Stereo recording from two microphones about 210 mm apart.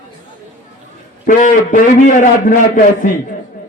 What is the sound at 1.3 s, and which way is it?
A man's voice, 40° left (ahead or behind).